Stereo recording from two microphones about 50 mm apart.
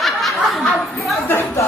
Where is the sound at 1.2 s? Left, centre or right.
Left.